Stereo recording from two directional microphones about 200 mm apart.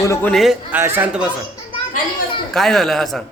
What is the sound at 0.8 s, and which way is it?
Speech, 10° right (ahead or behind).